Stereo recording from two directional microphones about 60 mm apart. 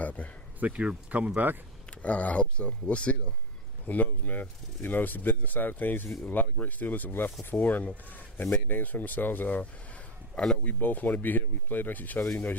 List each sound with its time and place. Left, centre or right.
0.0 s a sound: left
0.6 s speech: centre
1.9 s speech: left